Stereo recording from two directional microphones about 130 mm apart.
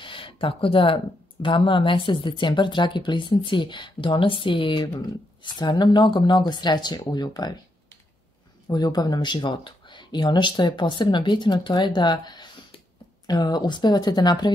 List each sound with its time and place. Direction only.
0.0 s speech: 40° left (ahead or behind)
8.6 s speech: 30° left (ahead or behind)